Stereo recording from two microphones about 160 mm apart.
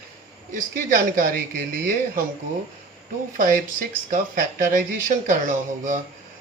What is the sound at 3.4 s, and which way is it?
Speech, 60° right (ahead or behind).